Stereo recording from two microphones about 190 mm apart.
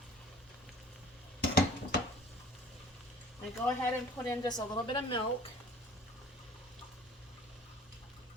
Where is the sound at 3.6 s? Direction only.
10° left (ahead or behind).